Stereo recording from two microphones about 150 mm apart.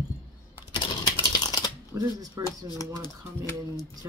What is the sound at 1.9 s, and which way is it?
Speech, 25° right (ahead or behind).